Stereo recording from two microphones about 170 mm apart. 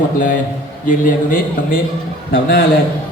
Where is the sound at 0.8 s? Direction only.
50° left (ahead or behind).